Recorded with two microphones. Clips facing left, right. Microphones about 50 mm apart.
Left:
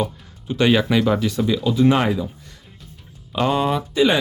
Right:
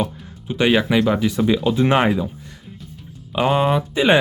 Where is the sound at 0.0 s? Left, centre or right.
Centre.